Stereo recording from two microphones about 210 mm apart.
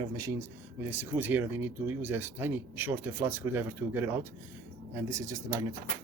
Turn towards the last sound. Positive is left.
turn(degrees=-15)  # may be behind; listen again after turning